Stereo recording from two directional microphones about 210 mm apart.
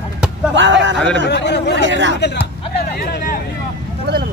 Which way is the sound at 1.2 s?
55° left (ahead or behind).